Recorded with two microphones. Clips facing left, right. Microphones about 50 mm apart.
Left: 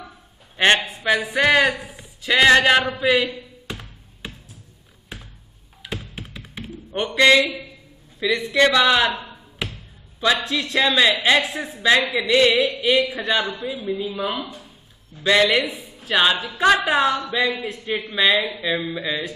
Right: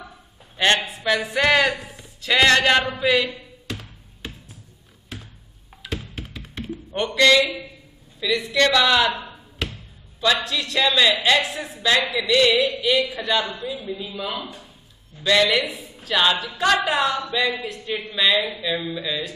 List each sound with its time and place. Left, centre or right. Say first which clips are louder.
0.6 s speech: left 2 dB; left
1.1 s a man's voice: left 1 dB; centre
3.6 s music: right 4 dB; centre
5.8 s music: right 1 dB; centre
7.2 s a man's voice: left 1 dB; centre
9.6 s basketball bounce: even; centre
10.4 s a man's voice: left 1 dB; left